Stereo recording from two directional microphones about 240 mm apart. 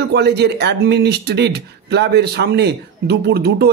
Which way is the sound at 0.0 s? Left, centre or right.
Right.